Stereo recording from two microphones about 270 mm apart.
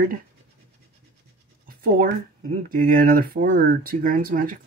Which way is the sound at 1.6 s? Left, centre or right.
Right.